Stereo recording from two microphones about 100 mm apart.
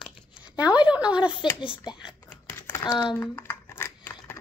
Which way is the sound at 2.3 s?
15° left (ahead or behind).